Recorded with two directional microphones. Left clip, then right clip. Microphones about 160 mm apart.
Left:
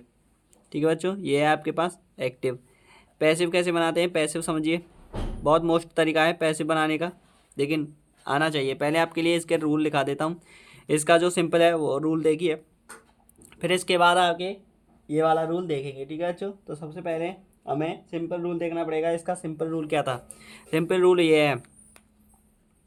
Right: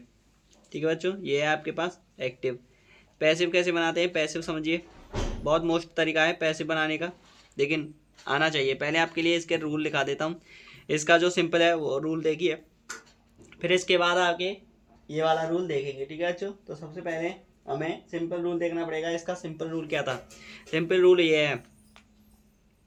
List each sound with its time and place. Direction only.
0.7 s speech: 50° left (ahead or behind)
16.9 s speech: 70° left (ahead or behind); by 21.6 s 45° left (ahead or behind)